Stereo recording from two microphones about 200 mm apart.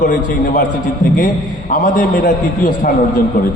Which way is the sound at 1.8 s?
40° left (ahead or behind).